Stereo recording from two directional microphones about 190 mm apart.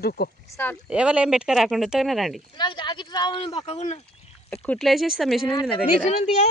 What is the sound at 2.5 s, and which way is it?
Speech, 25° left (ahead or behind).